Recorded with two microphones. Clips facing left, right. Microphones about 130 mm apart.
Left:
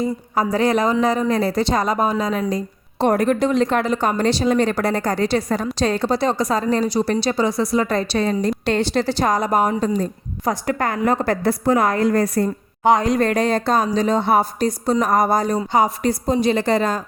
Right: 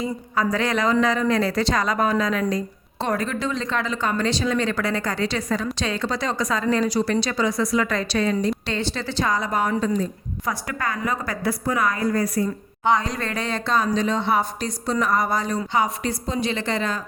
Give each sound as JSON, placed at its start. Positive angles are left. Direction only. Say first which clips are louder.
{"t": 0.0, "sound": "a woman's voice", "louder": "left 3 dB", "side_deg": 35}
{"t": 3.0, "sound": "a woman's voice", "louder": "left 8 dB", "side_deg": 55}
{"t": 8.6, "sound": "speech", "louder": "left 8 dB", "side_deg": 55}
{"t": 9.0, "sound": "a woman's voice", "louder": "left 5 dB", "side_deg": 45}
{"t": 10.7, "sound": "a woman's voice", "louder": "left 8 dB", "side_deg": 55}